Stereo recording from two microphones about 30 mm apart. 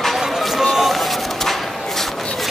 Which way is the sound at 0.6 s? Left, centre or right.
Centre.